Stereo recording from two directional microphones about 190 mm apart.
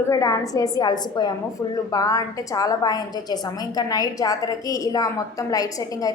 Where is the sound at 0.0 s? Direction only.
15° left (ahead or behind).